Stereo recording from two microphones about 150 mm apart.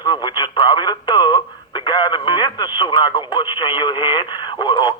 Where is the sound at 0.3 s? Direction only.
30° left (ahead or behind).